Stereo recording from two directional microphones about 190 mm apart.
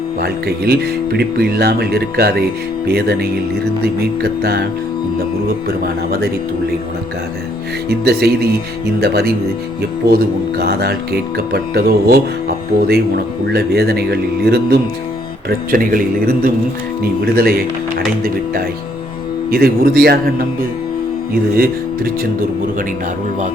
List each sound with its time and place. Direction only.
0.2 s speech: 55° right (ahead or behind)
5.6 s a man's voice: 50° right (ahead or behind)
7.9 s speech: 55° right (ahead or behind)
13.5 s speech: 55° right (ahead or behind)
15.4 s a man's voice: 45° right (ahead or behind)
19.5 s a man's voice: 50° right (ahead or behind)
21.6 s a man's voice: 50° right (ahead or behind)